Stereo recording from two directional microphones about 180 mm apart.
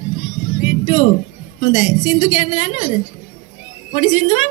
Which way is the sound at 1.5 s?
40° left (ahead or behind).